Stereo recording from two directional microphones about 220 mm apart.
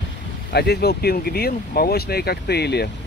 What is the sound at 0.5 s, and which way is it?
Speech, 45° left (ahead or behind).